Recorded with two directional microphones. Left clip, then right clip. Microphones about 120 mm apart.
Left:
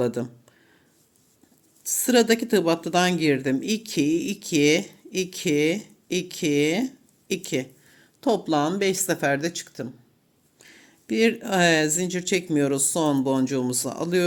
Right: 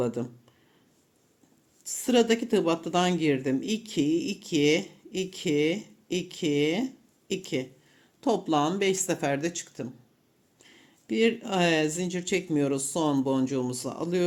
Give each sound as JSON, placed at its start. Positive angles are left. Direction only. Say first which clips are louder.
{"t": 0.0, "sound": "speech", "louder": "left 4 dB", "side_deg": 35}
{"t": 1.8, "sound": "speech", "louder": "left 4 dB", "side_deg": 35}